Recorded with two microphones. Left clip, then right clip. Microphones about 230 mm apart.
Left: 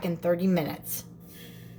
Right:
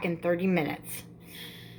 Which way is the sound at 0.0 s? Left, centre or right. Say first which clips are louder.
Left 1 dB; centre.